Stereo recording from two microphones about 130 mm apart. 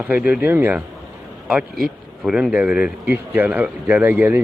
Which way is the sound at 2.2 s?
5° right (ahead or behind).